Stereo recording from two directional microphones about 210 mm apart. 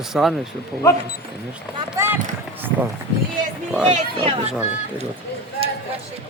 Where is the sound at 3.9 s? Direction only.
30° right (ahead or behind).